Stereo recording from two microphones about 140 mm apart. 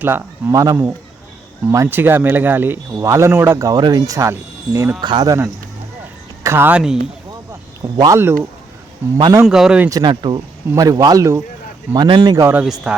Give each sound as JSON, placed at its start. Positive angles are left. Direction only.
{"t": 0.0, "sound": "speech", "side_deg": -15}
{"t": 4.9, "sound": "speech", "side_deg": -30}
{"t": 6.4, "sound": "speech", "side_deg": -15}
{"t": 7.9, "sound": "speech", "side_deg": -30}
{"t": 9.0, "sound": "a man's voice", "side_deg": -15}
{"t": 9.5, "sound": "speech", "side_deg": -5}
{"t": 9.9, "sound": "speech", "side_deg": -35}
{"t": 11.9, "sound": "speech", "side_deg": -30}
{"t": 12.6, "sound": "speech", "side_deg": -5}